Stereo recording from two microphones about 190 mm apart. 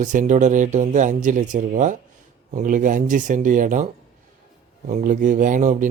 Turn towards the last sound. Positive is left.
turn(degrees=-40)  # may be behind; listen again after turning